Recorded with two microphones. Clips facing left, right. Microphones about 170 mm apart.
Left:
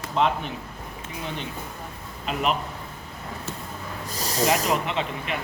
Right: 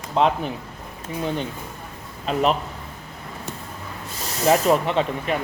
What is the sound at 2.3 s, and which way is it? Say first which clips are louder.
Speech: right 5 dB; 35° right (ahead or behind).